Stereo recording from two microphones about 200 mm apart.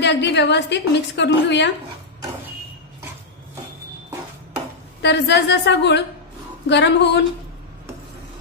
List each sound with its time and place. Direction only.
0.0 s a woman's voice: 60° left (ahead or behind)
5.0 s a woman's voice: 60° left (ahead or behind)